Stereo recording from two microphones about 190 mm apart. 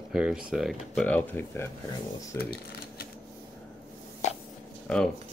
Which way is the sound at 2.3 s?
55° left (ahead or behind).